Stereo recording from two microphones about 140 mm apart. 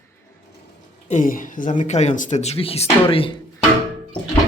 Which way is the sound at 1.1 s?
70° left (ahead or behind).